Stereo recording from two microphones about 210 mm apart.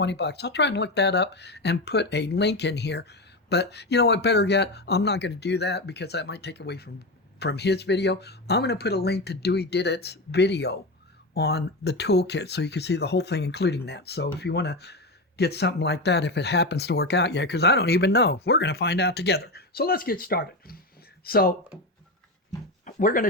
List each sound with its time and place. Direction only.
0.0 s speech: 55° left (ahead or behind)
22.9 s speech: 40° left (ahead or behind)